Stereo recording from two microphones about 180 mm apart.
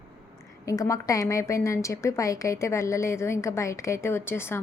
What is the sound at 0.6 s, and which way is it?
A woman's voice, 20° left (ahead or behind).